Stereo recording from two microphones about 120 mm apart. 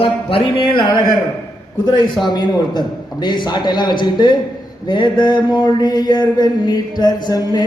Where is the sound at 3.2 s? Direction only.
40° left (ahead or behind).